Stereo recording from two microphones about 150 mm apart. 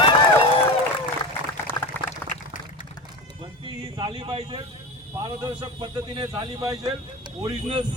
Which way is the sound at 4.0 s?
35° right (ahead or behind).